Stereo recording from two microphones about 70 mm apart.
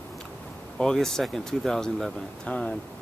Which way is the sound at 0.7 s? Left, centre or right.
Centre.